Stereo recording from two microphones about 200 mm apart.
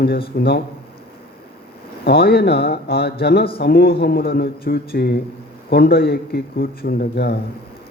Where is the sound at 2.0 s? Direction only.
50° left (ahead or behind).